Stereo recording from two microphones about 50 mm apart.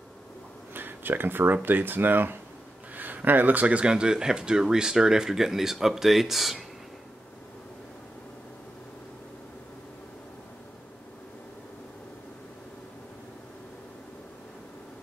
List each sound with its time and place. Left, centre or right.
0.7 s speech: right; by 6.6 s centre